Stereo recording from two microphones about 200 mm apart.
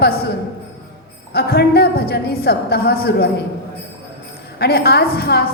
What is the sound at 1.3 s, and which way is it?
A man's voice, 50° left (ahead or behind).